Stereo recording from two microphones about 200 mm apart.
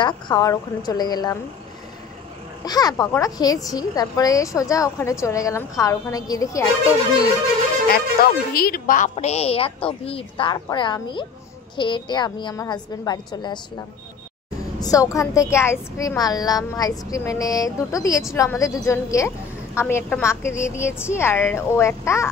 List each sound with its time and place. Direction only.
0.0 s a woman's voice: 20° left (ahead or behind)
2.6 s a woman's voice: 20° left (ahead or behind)
7.9 s speech: 50° left (ahead or behind)
9.1 s a woman's voice: 30° left (ahead or behind)
14.8 s a woman's voice: 15° left (ahead or behind)